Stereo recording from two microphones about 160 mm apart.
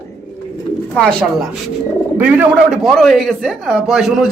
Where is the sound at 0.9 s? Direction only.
5° left (ahead or behind).